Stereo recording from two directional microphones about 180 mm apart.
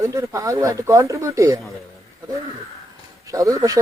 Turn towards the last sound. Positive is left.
turn(degrees=-20)  # may be behind; listen again after turning